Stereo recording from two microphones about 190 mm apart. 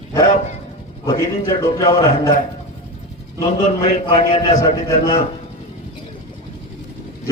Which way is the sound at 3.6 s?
35° left (ahead or behind).